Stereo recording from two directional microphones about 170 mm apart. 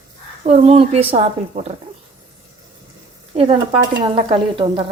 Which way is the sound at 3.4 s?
35° right (ahead or behind).